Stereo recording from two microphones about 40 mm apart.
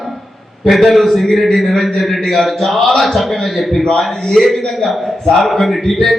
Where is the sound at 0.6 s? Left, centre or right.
Centre.